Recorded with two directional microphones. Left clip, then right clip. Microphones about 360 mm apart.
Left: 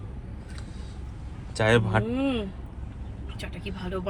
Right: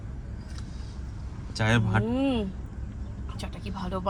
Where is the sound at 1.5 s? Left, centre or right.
Centre.